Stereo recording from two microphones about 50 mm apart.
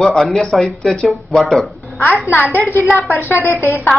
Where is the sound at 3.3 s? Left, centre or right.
Left.